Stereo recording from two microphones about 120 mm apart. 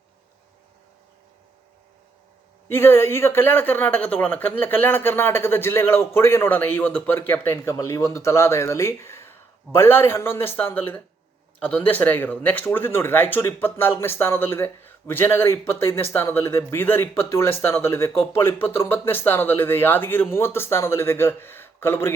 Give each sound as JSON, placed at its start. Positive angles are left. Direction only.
{"t": 2.6, "sound": "speech", "side_deg": 20}